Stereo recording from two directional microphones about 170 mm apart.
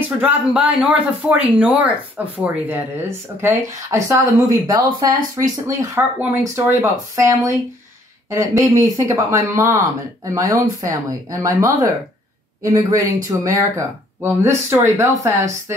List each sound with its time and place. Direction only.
0.2 s speech: 5° right (ahead or behind)